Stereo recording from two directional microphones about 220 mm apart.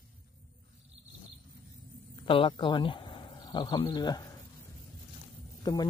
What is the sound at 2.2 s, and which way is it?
Speech, 25° left (ahead or behind).